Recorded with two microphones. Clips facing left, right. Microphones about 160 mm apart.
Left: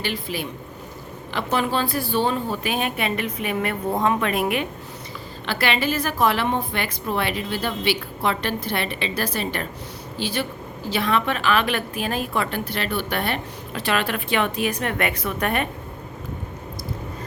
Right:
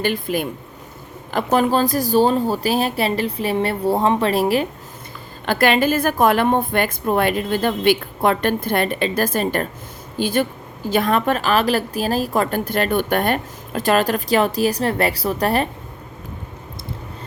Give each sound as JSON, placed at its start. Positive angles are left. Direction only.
{"t": 0.0, "sound": "a woman's voice", "side_deg": -50}
{"t": 5.5, "sound": "a woman's voice", "side_deg": -45}